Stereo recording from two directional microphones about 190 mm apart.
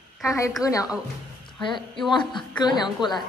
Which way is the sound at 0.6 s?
15° left (ahead or behind).